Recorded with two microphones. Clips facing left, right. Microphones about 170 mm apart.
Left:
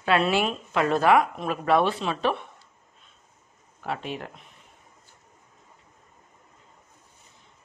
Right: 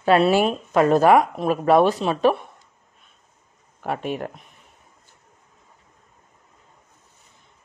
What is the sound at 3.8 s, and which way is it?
Speech, 50° right (ahead or behind).